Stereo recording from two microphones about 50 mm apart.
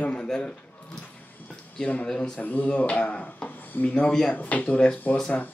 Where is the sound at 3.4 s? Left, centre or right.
Left.